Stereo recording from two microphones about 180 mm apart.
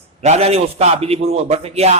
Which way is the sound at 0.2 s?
35° right (ahead or behind).